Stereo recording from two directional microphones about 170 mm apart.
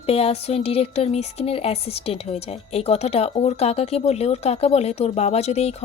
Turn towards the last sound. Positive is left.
turn(degrees=40)  # may be behind; listen again after turning